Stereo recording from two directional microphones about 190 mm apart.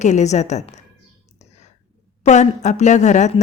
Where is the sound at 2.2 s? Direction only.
35° left (ahead or behind).